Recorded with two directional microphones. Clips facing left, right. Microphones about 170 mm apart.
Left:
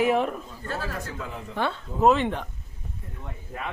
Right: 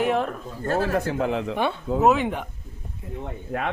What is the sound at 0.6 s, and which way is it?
Speech, 50° right (ahead or behind).